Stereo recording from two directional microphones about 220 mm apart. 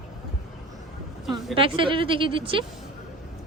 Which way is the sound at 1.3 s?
25° right (ahead or behind).